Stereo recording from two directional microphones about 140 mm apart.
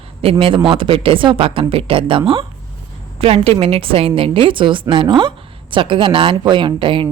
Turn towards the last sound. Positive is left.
turn(degrees=-35)  # may be behind; listen again after turning